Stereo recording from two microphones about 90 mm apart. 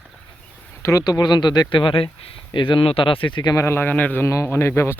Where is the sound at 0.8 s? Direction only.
35° left (ahead or behind).